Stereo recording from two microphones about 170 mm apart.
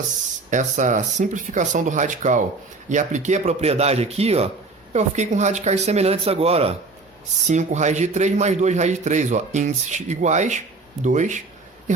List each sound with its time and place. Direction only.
0.5 s a man's voice: 45° right (ahead or behind)